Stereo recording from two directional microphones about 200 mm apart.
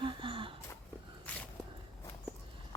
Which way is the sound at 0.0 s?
25° right (ahead or behind).